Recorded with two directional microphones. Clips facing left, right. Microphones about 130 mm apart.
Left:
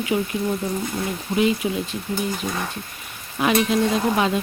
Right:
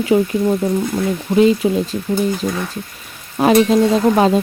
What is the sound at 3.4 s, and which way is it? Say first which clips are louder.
Speech: right 7 dB; 40° right (ahead or behind).